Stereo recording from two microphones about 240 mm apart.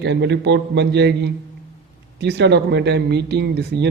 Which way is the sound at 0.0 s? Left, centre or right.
Right.